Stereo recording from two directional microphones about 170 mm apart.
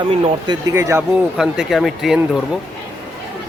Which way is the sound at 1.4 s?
Centre (ahead or behind).